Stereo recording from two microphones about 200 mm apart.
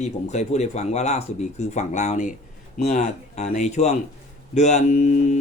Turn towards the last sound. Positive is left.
turn(degrees=35)  # may be behind; listen again after turning